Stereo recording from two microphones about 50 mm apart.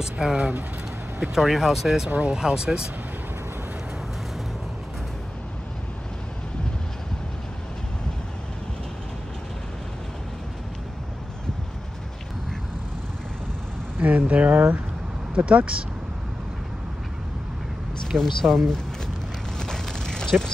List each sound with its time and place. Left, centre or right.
0.0 s speech: centre
2.0 s speech: right
2.3 s speech: centre
13.9 s speech: right
15.3 s speech: right
18.1 s speech: centre
19.6 s mechanisms: centre